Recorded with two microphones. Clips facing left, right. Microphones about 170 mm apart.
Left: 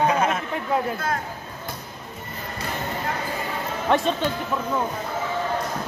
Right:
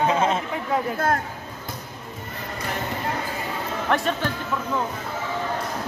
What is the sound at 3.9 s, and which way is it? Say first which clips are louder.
Speech: left 3 dB; 20° left (ahead or behind).